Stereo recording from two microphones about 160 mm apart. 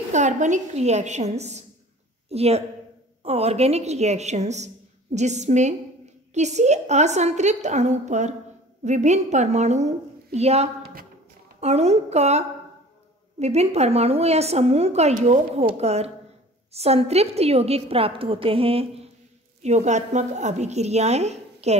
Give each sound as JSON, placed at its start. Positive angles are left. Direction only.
{"t": 0.1, "sound": "a woman's voice", "side_deg": -50}